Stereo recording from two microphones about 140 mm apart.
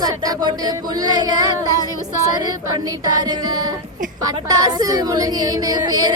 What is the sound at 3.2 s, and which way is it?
Female singing, 25° right (ahead or behind).